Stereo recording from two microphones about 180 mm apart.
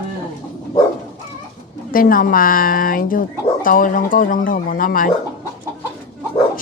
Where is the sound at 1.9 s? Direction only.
50° left (ahead or behind).